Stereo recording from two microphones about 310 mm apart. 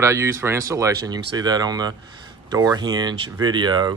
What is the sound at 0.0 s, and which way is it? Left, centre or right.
Speech, centre.